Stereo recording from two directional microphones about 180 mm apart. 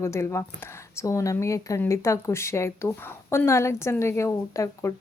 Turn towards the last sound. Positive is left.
turn(degrees=15)  # may be behind; listen again after turning